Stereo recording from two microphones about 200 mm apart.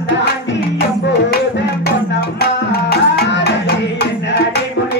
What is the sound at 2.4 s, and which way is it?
Tabla, 55° left (ahead or behind).